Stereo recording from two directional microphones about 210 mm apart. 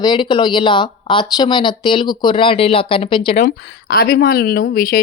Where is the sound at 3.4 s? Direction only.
50° left (ahead or behind).